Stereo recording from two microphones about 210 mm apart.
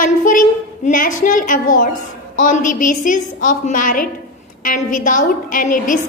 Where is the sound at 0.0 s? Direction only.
40° left (ahead or behind).